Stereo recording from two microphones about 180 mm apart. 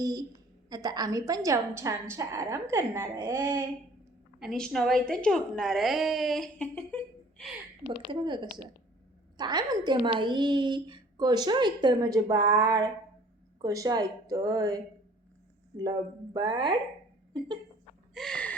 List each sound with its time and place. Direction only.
0.0 s a woman's voice: 20° right (ahead or behind)
4.4 s a woman's voice: centre (ahead or behind)
8.1 s a woman's voice: 25° right (ahead or behind)
16.3 s a woman's voice: 25° right (ahead or behind)
18.1 s gasp: 5° left (ahead or behind)